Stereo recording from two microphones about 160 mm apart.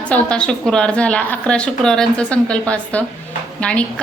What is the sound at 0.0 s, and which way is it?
A woman's voice, 5° left (ahead or behind).